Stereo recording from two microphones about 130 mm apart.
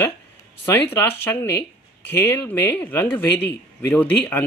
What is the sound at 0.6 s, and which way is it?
Speech, 15° left (ahead or behind).